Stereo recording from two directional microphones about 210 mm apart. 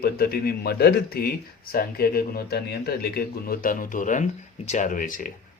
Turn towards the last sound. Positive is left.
turn(degrees=40)  # may be behind; listen again after turning